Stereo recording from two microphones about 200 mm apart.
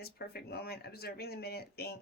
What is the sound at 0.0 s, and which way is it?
Speech, 50° left (ahead or behind).